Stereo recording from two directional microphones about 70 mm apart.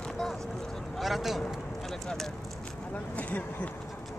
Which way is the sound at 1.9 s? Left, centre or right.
Centre.